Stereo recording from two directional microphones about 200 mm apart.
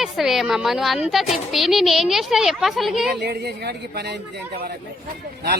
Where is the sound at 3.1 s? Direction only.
55° right (ahead or behind).